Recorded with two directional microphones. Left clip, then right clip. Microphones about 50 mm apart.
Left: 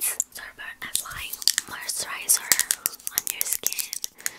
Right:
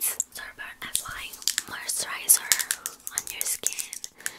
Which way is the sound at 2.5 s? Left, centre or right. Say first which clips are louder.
Left 2 dB; left.